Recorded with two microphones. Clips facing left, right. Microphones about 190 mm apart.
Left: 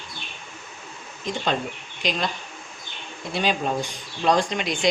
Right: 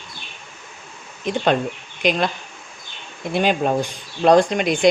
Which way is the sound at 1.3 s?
60° right (ahead or behind).